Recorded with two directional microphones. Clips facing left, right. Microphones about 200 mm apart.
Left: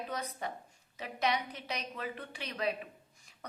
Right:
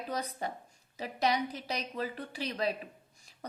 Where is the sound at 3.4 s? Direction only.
35° right (ahead or behind).